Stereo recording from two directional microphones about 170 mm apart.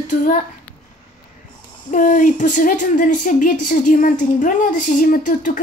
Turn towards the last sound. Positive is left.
turn(degrees=50)  # may be behind; listen again after turning